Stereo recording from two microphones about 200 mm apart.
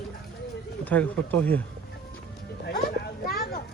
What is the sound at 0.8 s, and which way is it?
Speech, 10° left (ahead or behind).